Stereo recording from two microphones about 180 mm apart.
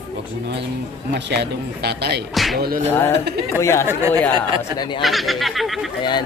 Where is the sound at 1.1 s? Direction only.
70° right (ahead or behind).